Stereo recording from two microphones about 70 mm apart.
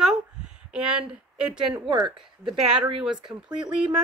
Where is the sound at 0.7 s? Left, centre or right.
Centre.